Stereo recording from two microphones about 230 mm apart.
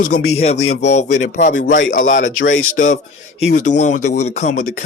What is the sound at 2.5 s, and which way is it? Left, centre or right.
Speech, left.